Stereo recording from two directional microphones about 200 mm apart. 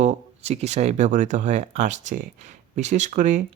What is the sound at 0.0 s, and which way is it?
Speech, 35° right (ahead or behind).